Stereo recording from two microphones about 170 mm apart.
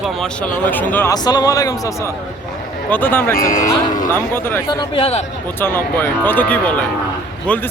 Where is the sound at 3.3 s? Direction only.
55° left (ahead or behind).